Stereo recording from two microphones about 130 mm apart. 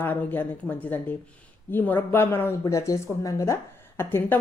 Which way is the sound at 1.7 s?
15° left (ahead or behind).